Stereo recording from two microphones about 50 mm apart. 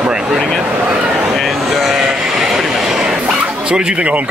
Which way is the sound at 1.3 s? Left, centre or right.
Centre.